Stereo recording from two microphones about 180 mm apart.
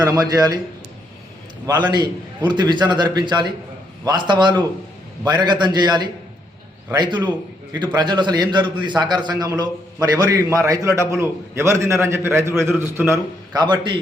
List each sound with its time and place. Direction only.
0.0 s a man's voice: 20° right (ahead or behind)
1.6 s a man's voice: 25° right (ahead or behind)